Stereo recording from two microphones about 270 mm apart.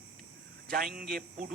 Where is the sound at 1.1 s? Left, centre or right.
Right.